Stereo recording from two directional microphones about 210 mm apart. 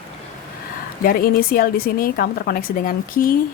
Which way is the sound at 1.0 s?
45° left (ahead or behind).